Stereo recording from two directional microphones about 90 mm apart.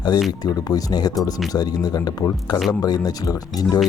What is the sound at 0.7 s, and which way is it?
Speech, 45° left (ahead or behind).